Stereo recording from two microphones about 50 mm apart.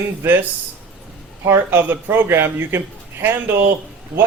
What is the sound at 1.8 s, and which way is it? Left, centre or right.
Speech, right.